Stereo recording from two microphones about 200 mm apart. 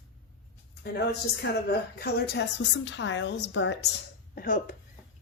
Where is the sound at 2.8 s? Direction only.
65° left (ahead or behind).